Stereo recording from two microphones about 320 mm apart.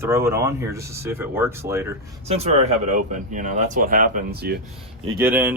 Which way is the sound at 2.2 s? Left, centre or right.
Centre.